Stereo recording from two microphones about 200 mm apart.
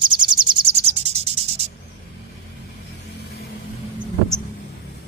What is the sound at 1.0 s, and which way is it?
Music, 30° right (ahead or behind).